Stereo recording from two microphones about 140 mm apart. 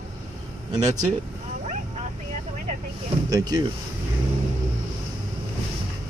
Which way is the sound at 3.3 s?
25° right (ahead or behind).